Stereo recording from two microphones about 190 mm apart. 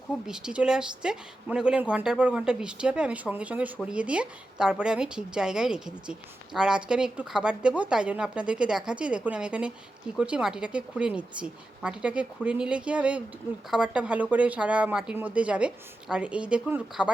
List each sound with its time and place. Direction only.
0.3 s a woman's voice: 5° right (ahead or behind)